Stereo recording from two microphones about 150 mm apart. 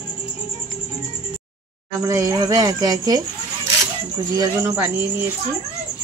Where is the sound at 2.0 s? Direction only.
20° right (ahead or behind).